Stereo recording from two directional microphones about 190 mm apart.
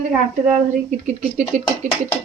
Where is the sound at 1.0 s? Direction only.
40° right (ahead or behind).